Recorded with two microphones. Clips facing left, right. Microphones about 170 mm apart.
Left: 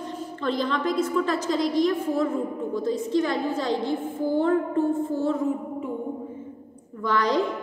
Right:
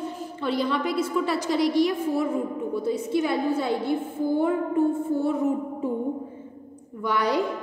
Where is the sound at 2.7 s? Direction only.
10° right (ahead or behind).